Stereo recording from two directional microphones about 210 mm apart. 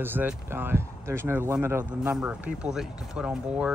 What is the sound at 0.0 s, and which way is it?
Speech, 10° right (ahead or behind).